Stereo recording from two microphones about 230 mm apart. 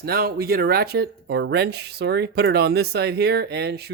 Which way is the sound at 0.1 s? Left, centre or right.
Right.